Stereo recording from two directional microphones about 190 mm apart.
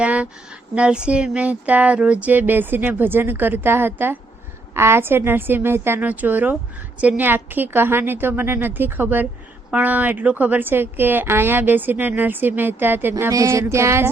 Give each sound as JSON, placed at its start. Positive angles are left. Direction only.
{"t": 0.0, "sound": "a woman's voice", "side_deg": -5}